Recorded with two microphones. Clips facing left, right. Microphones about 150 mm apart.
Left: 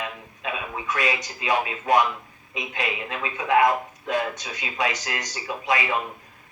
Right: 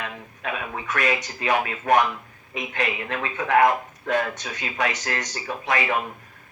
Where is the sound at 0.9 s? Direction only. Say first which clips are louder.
Right 3 dB; 55° right (ahead or behind).